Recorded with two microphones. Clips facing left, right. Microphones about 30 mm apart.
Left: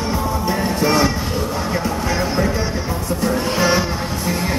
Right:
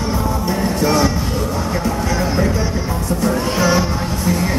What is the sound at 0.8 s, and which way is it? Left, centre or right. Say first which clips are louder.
Music: right 1 dB; left.